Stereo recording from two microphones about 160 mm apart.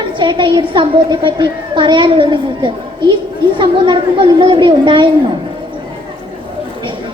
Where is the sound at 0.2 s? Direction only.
30° right (ahead or behind).